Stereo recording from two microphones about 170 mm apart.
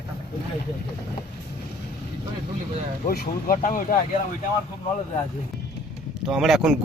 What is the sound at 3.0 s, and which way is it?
Speech, 60° left (ahead or behind).